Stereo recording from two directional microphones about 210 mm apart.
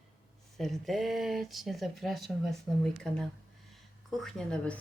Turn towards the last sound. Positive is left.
turn(degrees=5)  # may be behind; listen again after turning